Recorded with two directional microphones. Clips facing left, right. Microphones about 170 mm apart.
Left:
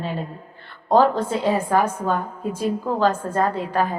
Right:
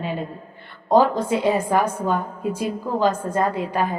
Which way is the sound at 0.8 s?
10° right (ahead or behind).